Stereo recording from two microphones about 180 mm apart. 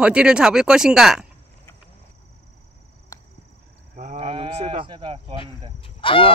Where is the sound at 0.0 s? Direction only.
5° right (ahead or behind).